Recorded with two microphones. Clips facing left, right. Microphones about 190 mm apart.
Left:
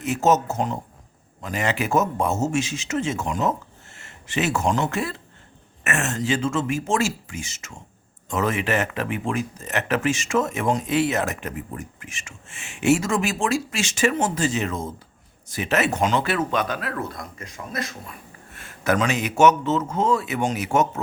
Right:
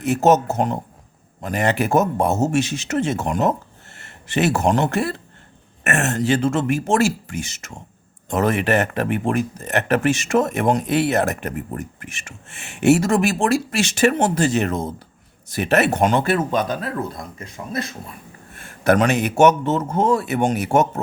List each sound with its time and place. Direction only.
0.0 s speech: 60° right (ahead or behind)
3.9 s a sound: 65° right (ahead or behind)
4.6 s speech: 65° right (ahead or behind); by 16.9 s 40° right (ahead or behind)
17.1 s speech: 25° right (ahead or behind)
18.9 s speech: 65° right (ahead or behind)